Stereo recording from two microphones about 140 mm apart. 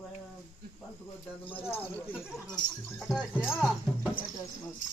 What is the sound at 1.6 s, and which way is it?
Speech, 15° left (ahead or behind).